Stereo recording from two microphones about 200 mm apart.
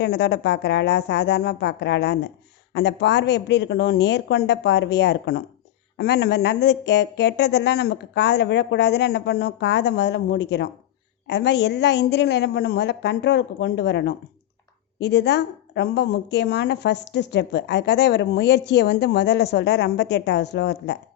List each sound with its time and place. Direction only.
0.0 s a woman's voice: 60° left (ahead or behind)